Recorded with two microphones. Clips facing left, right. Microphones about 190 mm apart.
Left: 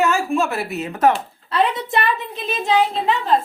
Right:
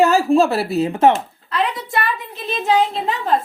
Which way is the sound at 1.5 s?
20° left (ahead or behind).